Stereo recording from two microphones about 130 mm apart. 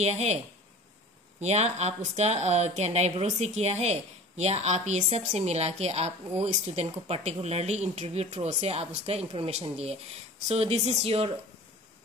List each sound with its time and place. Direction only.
0.0 s speech: 55° right (ahead or behind)
1.4 s speech: 55° right (ahead or behind)